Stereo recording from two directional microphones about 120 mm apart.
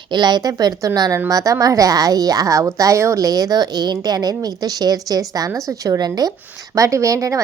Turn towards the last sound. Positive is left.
turn(degrees=-25)  # may be behind; listen again after turning